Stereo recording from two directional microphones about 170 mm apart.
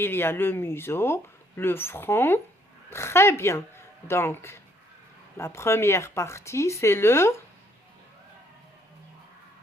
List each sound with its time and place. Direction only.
0.0 s speech: 15° left (ahead or behind)